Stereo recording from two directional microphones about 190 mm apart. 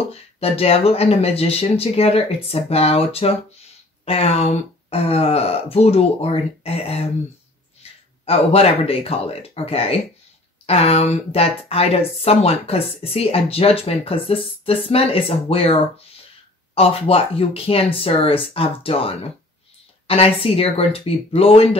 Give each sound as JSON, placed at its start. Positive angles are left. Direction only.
{"t": 0.1, "sound": "speech", "side_deg": 30}
{"t": 8.3, "sound": "speech", "side_deg": 30}